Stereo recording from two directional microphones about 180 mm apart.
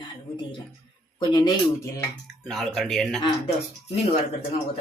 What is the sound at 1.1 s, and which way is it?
Speech, 25° left (ahead or behind).